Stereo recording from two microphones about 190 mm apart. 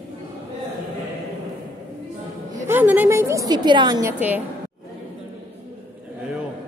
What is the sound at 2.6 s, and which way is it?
A woman's voice, 10° right (ahead or behind).